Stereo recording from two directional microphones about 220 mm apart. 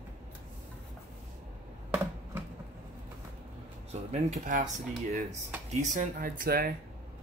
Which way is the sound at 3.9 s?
30° right (ahead or behind).